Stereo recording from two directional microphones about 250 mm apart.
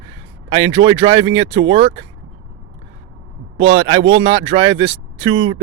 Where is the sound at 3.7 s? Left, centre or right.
Right.